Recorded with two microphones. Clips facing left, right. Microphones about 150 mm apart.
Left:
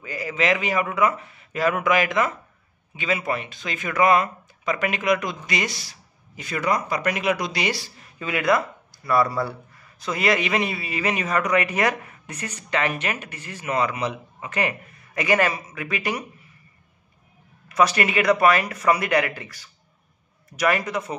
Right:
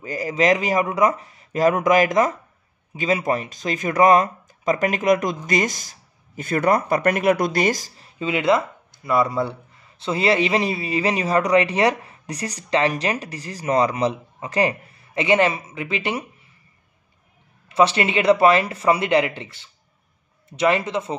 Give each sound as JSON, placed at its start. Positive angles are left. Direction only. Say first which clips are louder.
{"t": 0.0, "sound": "speech", "louder": "right 5 dB", "side_deg": -40}
{"t": 8.0, "sound": "speech", "louder": "right 2 dB", "side_deg": -25}
{"t": 17.6, "sound": "speech", "louder": "right 2 dB", "side_deg": -25}